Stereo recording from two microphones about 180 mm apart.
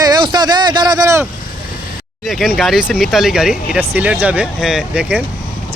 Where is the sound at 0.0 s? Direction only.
25° right (ahead or behind).